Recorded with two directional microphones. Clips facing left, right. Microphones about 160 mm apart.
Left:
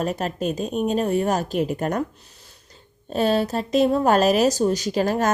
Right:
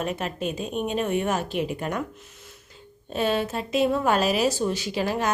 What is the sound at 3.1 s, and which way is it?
A woman's voice, 40° left (ahead or behind).